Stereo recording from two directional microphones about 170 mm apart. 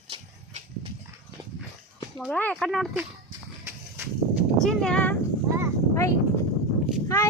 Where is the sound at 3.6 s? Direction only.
10° right (ahead or behind).